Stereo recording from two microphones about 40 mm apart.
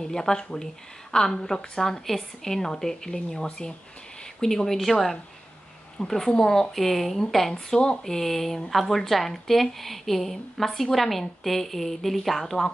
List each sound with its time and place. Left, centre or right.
0.0 s a woman's voice: centre
7.5 s a woman's voice: centre